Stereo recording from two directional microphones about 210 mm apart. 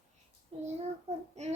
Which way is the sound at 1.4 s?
30° right (ahead or behind).